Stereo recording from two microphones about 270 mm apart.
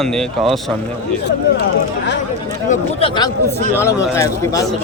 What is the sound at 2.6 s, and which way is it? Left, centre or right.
A man's voice, left.